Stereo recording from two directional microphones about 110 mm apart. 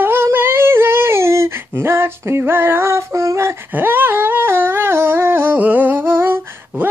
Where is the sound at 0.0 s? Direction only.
20° right (ahead or behind).